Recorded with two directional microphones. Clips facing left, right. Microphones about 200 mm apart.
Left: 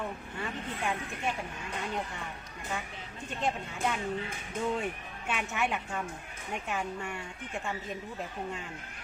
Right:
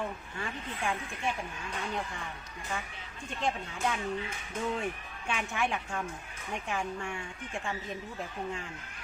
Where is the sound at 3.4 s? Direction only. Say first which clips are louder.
Even; 5° left (ahead or behind).